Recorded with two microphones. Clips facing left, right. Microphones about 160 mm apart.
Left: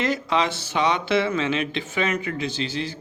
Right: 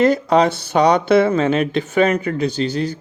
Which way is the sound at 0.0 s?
40° right (ahead or behind).